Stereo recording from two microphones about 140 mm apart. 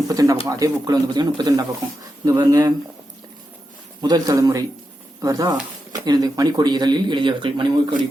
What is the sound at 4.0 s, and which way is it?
Speech, 30° right (ahead or behind).